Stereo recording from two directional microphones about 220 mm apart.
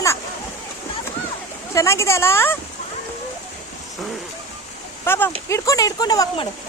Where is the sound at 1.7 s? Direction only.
15° left (ahead or behind).